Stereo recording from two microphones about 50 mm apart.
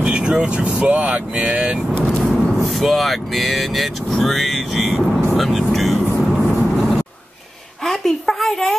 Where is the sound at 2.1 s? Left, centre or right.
Centre.